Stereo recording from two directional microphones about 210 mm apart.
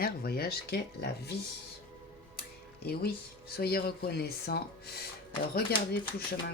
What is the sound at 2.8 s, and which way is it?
Speech, 50° left (ahead or behind).